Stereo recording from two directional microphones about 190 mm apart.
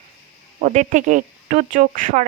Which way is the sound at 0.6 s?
40° right (ahead or behind).